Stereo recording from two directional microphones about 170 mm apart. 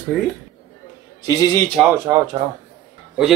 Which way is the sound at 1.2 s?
15° left (ahead or behind).